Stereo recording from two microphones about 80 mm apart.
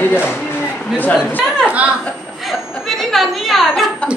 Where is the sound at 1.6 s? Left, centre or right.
Centre.